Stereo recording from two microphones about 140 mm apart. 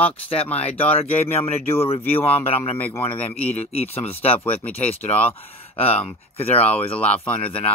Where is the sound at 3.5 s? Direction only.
50° left (ahead or behind).